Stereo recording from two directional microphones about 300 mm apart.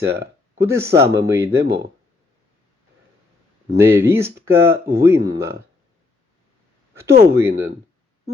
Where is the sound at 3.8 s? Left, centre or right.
Centre.